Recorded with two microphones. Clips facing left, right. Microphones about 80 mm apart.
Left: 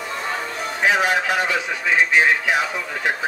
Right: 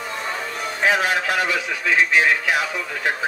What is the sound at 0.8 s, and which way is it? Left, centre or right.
Speech, centre.